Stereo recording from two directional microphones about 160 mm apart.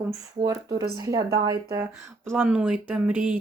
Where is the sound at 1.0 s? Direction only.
25° right (ahead or behind).